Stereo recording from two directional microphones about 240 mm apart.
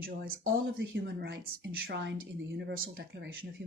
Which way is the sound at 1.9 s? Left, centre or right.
Right.